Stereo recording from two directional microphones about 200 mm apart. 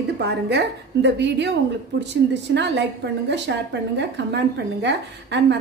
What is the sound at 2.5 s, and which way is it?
A woman's voice, 60° right (ahead or behind).